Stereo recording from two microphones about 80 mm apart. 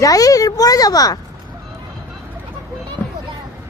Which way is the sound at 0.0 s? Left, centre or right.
Left.